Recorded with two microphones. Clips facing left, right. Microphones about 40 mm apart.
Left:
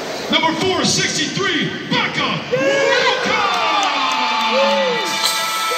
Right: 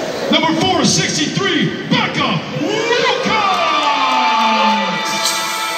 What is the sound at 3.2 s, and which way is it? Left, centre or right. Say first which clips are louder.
Crowd: right 2 dB; centre.